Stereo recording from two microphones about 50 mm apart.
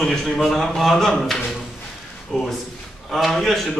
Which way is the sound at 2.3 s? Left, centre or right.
Centre.